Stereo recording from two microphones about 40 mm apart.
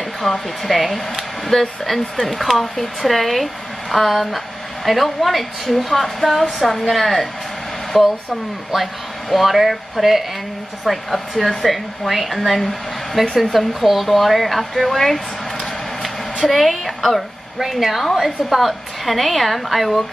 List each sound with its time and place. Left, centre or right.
0.2 s speech: centre
16.4 s speech: centre